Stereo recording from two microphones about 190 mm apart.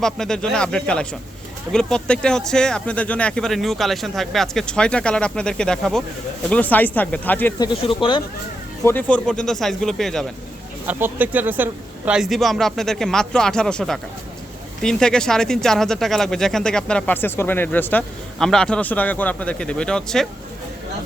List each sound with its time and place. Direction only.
0.0 s speech: 5° left (ahead or behind)
7.6 s speech: 25° left (ahead or behind)
8.8 s speech: 10° left (ahead or behind)
10.8 s speech: 10° right (ahead or behind)